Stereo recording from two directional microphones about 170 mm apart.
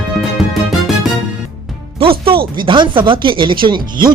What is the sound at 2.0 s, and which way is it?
Music, 35° right (ahead or behind).